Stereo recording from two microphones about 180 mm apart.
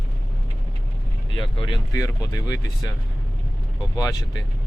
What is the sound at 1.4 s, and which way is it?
Speech, 30° left (ahead or behind).